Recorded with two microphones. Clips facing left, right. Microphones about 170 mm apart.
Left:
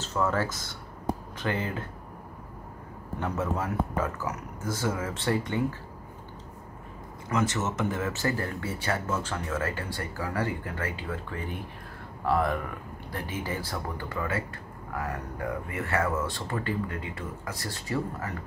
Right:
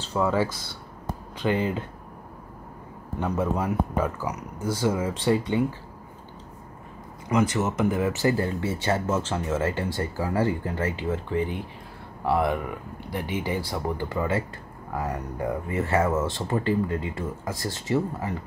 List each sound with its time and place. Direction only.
0.1 s speech: 15° right (ahead or behind)
3.2 s speech: 15° right (ahead or behind)
7.3 s speech: 15° right (ahead or behind)